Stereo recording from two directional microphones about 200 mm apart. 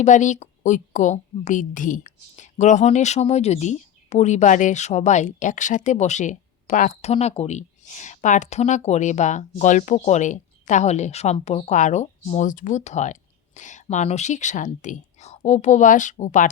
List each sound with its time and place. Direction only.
0.0 s a woman's voice: 35° left (ahead or behind)